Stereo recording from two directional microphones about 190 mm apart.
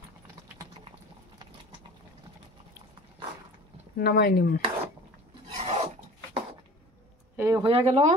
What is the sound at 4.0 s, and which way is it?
Speech, 55° left (ahead or behind).